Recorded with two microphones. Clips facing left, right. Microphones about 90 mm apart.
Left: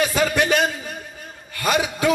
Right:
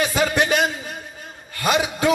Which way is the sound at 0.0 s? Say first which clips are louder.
Even; 30° right (ahead or behind).